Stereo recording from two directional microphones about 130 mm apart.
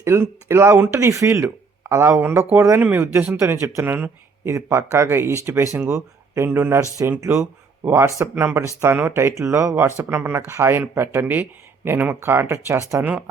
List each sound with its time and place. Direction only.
0.0 s speech: 20° right (ahead or behind)